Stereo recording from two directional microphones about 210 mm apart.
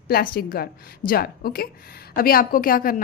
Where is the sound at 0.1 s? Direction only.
45° left (ahead or behind).